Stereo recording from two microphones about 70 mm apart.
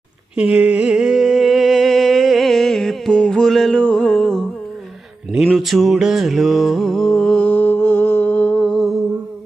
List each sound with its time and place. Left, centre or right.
0.3 s a sound: centre
3.8 s music: centre
5.5 s music: centre; by 8.6 s left
8.6 s music: centre